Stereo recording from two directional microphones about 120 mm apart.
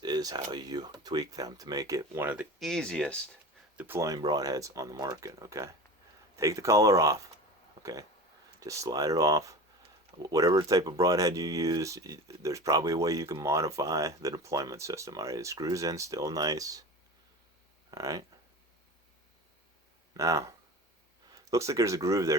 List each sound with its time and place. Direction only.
0.0 s a sound: 35° right (ahead or behind)
0.5 s speech: 35° right (ahead or behind); by 2.5 s 15° right (ahead or behind)
2.6 s speech: 5° left (ahead or behind)
3.8 s speech: 20° right (ahead or behind)
17.9 s speech: 30° right (ahead or behind)
20.1 s speech: 25° right (ahead or behind)
21.5 s speech: 25° right (ahead or behind)